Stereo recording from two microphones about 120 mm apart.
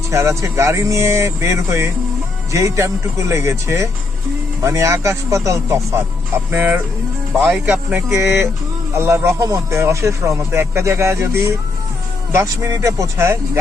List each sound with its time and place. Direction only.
0.1 s speech: 25° right (ahead or behind)
8.1 s speech: 20° right (ahead or behind)